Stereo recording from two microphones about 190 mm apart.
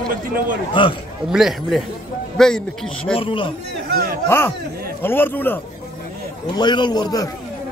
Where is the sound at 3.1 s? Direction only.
25° left (ahead or behind).